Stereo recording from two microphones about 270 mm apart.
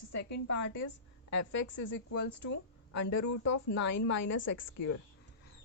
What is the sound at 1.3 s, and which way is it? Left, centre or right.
A woman's voice, left.